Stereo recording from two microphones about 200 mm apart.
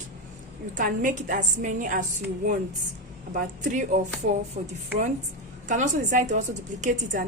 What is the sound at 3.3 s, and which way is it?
A woman's voice, 40° right (ahead or behind).